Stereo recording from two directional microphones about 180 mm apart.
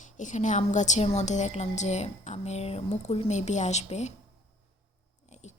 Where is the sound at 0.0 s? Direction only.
45° left (ahead or behind).